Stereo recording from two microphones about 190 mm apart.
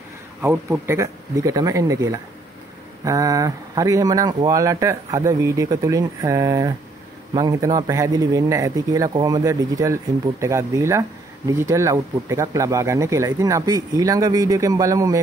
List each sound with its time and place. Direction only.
0.4 s speech: 15° right (ahead or behind)